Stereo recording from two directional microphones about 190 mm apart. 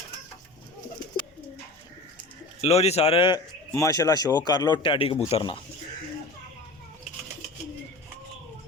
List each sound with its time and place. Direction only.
2.6 s a man's voice: 35° left (ahead or behind)